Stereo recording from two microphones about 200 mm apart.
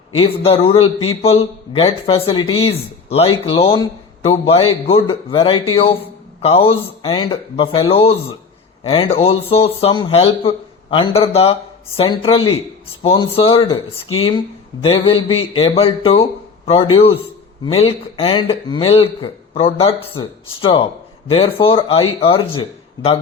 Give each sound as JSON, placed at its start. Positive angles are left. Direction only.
{"t": 0.2, "sound": "speech", "side_deg": 30}